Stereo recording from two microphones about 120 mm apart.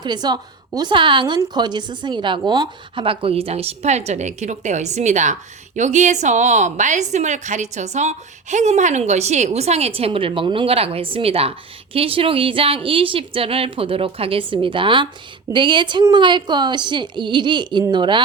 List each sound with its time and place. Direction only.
0.0 s a woman's voice: 35° right (ahead or behind)